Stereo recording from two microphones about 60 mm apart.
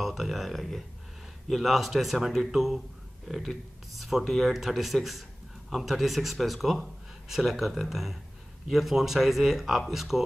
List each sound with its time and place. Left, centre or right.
0.0 s a man's voice: centre